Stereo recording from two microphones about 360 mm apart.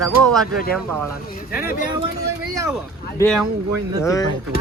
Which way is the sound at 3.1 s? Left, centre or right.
Centre.